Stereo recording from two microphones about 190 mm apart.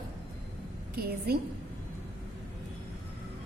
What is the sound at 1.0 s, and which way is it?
Speech, 55° right (ahead or behind).